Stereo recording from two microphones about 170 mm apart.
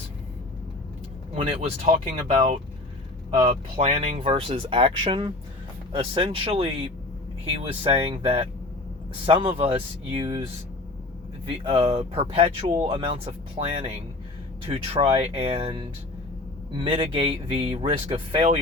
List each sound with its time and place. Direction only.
1.5 s speech: 35° right (ahead or behind)
11.4 s speech: 30° right (ahead or behind)